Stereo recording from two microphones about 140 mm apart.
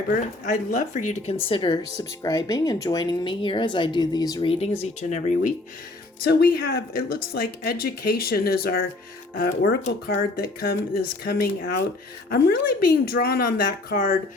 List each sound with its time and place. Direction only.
0.1 s speech: 70° left (ahead or behind)
1.5 s speech: 35° left (ahead or behind)
2.0 s speech: 25° left (ahead or behind); by 5.5 s 65° left (ahead or behind)
6.4 s speech: 90° left